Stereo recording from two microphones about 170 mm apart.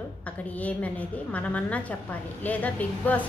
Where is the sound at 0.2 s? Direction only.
10° left (ahead or behind).